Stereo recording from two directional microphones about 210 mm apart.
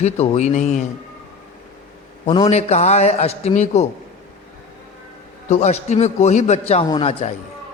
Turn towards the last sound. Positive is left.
turn(degrees=20)  # may be behind; listen again after turning